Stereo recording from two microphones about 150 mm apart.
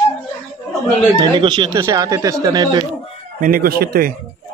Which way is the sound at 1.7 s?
20° right (ahead or behind).